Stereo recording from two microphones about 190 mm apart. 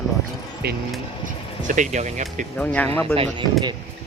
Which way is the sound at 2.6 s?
5° left (ahead or behind).